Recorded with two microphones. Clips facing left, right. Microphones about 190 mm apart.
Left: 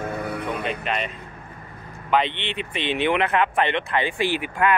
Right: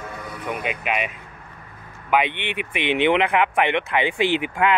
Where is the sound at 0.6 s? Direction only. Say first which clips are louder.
Right 1 dB; 10° right (ahead or behind).